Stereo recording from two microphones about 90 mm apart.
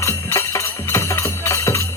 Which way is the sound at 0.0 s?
30° left (ahead or behind).